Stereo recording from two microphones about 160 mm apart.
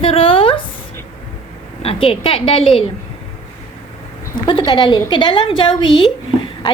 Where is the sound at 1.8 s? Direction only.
35° left (ahead or behind).